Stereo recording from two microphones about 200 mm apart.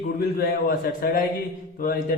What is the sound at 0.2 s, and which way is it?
A man's voice, 50° left (ahead or behind).